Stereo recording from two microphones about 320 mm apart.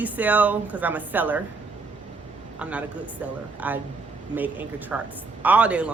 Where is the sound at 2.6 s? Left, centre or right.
Centre.